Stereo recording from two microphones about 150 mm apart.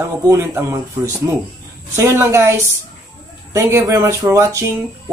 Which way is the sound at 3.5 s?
20° right (ahead or behind).